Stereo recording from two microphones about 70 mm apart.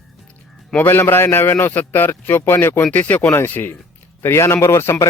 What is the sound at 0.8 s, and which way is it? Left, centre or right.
A man's voice, left.